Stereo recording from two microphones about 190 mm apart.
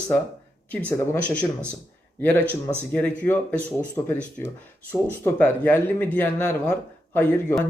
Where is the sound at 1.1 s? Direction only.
5° left (ahead or behind).